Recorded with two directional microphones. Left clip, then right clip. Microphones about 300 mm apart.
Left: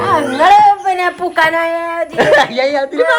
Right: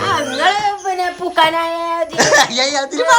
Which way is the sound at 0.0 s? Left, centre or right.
Centre.